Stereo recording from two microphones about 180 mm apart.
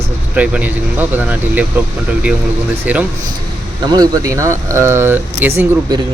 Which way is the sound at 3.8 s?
25° right (ahead or behind).